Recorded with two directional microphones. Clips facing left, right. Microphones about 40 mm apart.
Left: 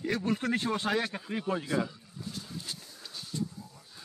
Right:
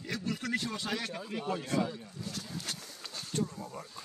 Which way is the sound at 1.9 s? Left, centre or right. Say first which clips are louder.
Right 3 dB; right.